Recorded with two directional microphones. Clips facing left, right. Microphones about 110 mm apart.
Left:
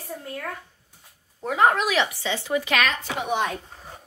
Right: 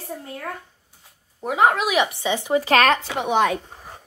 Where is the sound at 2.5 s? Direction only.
35° right (ahead or behind).